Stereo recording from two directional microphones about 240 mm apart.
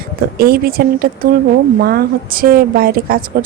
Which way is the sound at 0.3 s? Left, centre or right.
Right.